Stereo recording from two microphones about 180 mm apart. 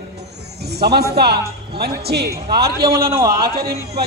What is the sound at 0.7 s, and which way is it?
A man's voice, 65° right (ahead or behind).